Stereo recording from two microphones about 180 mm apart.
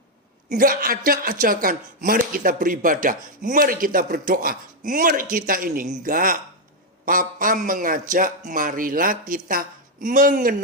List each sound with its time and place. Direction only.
0.4 s speech: 50° right (ahead or behind)